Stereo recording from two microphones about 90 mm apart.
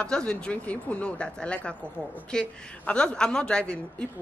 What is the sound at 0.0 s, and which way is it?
Speech, 10° left (ahead or behind).